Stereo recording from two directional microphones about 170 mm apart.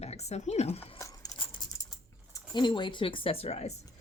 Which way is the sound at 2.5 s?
25° left (ahead or behind).